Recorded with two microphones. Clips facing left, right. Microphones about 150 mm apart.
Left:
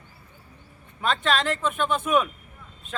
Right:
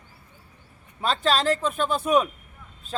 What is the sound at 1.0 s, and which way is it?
A man's voice, 35° right (ahead or behind).